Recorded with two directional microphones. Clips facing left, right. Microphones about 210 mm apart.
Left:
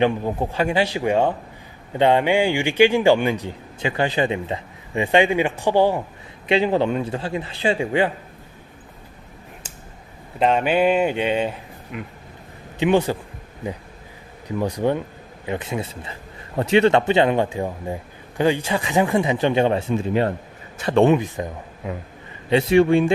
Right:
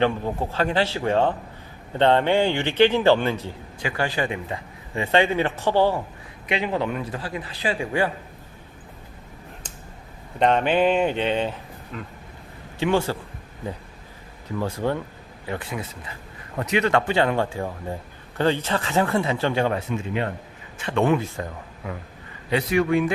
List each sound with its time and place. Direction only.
0.0 s a man's voice: 15° left (ahead or behind)
6.5 s speech: 30° left (ahead or behind)
10.4 s a man's voice: 10° left (ahead or behind)
14.6 s a man's voice: 15° left (ahead or behind); by 21.0 s 40° left (ahead or behind)
21.0 s speech: 20° left (ahead or behind)